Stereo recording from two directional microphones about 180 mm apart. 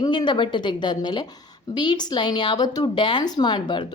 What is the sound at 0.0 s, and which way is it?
A woman's voice, 25° left (ahead or behind).